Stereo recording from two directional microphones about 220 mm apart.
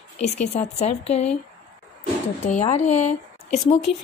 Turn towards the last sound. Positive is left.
turn(degrees=25)  # may be behind; listen again after turning